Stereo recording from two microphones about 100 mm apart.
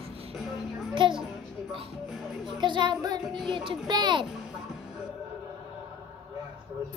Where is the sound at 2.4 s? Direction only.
50° right (ahead or behind).